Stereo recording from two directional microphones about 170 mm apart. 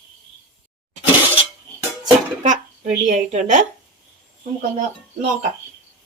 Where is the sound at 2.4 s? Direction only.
45° right (ahead or behind).